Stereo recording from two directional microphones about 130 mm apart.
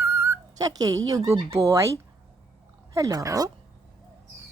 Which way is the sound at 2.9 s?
25° right (ahead or behind).